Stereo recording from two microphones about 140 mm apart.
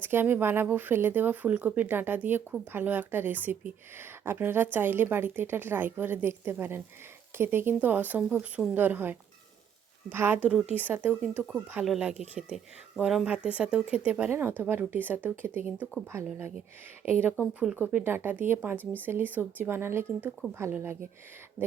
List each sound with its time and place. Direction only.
0.0 s speech: 15° right (ahead or behind)
17.1 s speech: 15° right (ahead or behind)